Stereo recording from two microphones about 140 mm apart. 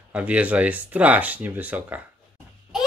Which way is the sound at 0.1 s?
10° right (ahead or behind).